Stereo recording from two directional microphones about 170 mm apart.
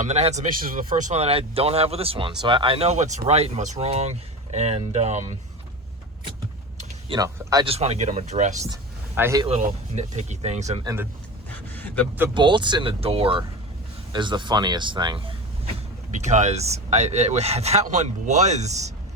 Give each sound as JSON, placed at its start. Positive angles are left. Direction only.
{"t": 0.0, "sound": "speech", "side_deg": -40}
{"t": 7.1, "sound": "speech", "side_deg": -25}
{"t": 7.7, "sound": "speech", "side_deg": -40}
{"t": 8.6, "sound": "a sound", "side_deg": -15}
{"t": 9.6, "sound": "speech", "side_deg": -45}
{"t": 11.5, "sound": "a sound", "side_deg": 10}
{"t": 12.3, "sound": "speech", "side_deg": -25}
{"t": 16.2, "sound": "speech", "side_deg": -45}